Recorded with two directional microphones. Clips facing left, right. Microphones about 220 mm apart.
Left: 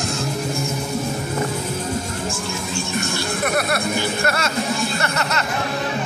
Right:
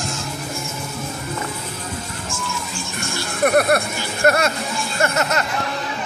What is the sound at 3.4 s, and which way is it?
Speech, 45° right (ahead or behind).